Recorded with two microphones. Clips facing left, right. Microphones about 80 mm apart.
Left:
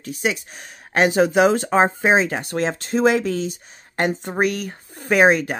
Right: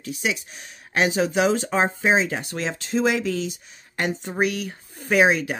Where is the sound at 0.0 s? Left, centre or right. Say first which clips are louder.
Left 3 dB; left.